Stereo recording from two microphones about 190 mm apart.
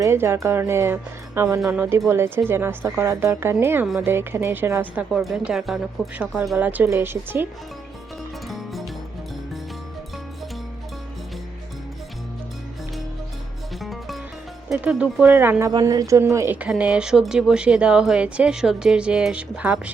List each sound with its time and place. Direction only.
0.0 s speech: 15° right (ahead or behind)
3.8 s speech: centre (ahead or behind)
4.1 s speech: 10° right (ahead or behind)
8.4 s music: centre (ahead or behind)
13.7 s music: centre (ahead or behind)
14.7 s speech: 5° right (ahead or behind)